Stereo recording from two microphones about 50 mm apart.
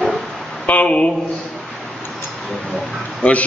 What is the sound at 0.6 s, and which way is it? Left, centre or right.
Speech, left.